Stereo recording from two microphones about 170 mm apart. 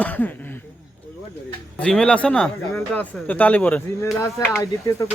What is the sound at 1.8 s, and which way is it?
Speech, 5° left (ahead or behind).